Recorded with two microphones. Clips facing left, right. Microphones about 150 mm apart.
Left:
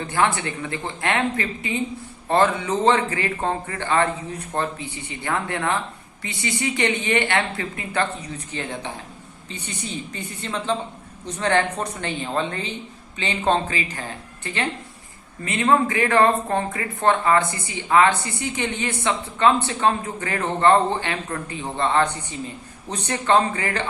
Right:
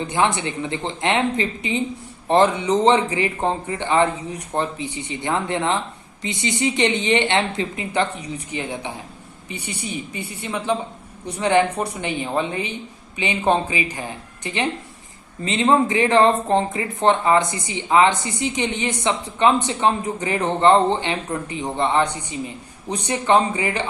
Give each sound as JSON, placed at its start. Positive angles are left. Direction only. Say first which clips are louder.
{"t": 0.0, "sound": "a woman's voice", "louder": "right 1 dB", "side_deg": -20}